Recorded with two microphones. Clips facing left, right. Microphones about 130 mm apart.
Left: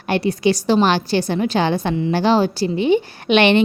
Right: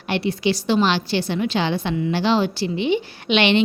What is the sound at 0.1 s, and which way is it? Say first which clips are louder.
A woman's voice: left 4 dB; 45° left (ahead or behind).